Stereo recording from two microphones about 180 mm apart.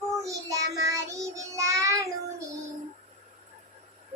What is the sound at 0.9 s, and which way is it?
Child singing, 15° right (ahead or behind).